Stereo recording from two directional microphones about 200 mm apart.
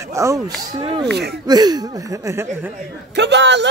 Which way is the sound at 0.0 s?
15° right (ahead or behind).